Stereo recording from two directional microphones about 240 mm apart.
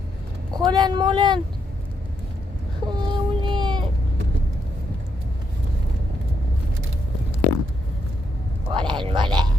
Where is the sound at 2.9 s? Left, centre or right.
Centre.